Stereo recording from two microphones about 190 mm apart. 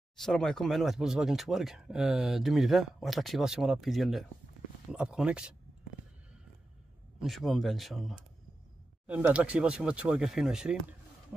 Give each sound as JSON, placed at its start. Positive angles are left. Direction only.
{"t": 0.1, "sound": "speech", "side_deg": 5}
{"t": 7.2, "sound": "speech", "side_deg": 0}